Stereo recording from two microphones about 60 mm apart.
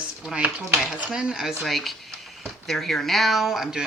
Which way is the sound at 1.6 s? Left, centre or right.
Centre.